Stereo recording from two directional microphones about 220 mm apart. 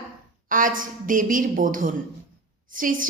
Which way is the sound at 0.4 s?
40° right (ahead or behind).